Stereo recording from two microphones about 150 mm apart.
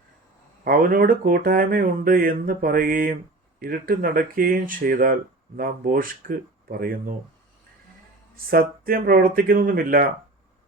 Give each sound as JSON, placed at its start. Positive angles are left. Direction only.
{"t": 0.6, "sound": "speech", "side_deg": -70}
{"t": 8.4, "sound": "speech", "side_deg": -75}